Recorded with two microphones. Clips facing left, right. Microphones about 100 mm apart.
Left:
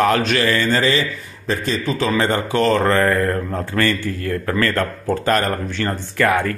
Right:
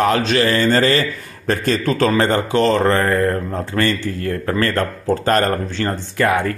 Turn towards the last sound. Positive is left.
turn(degrees=-25)  # may be behind; listen again after turning